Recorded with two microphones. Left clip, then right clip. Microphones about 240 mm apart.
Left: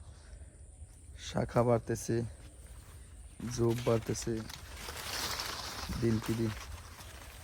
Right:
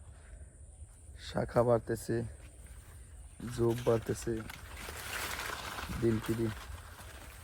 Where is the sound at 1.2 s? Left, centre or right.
Left.